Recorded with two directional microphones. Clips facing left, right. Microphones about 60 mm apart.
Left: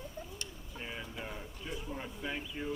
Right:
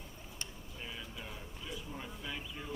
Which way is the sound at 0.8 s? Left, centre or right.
Left.